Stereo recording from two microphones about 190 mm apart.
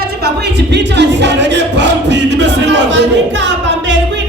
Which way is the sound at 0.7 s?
65° right (ahead or behind).